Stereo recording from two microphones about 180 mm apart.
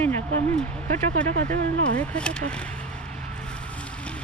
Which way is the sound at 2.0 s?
5° left (ahead or behind).